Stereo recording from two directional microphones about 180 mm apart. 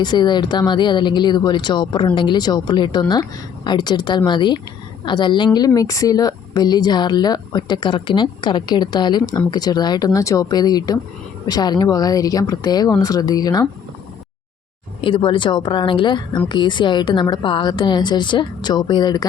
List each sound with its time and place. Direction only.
0.0 s speech: 25° left (ahead or behind)
15.0 s speech: 25° left (ahead or behind)